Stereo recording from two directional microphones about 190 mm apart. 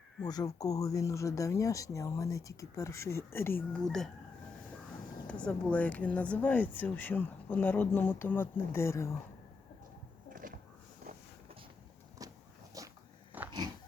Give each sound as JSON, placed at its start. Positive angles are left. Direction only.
{"t": 0.3, "sound": "speech", "side_deg": 20}
{"t": 3.7, "sound": "speech", "side_deg": 0}
{"t": 5.3, "sound": "speech", "side_deg": 5}
{"t": 10.4, "sound": "a sound", "side_deg": -45}
{"t": 12.2, "sound": "a sound", "side_deg": -20}
{"t": 12.8, "sound": "dog", "side_deg": -15}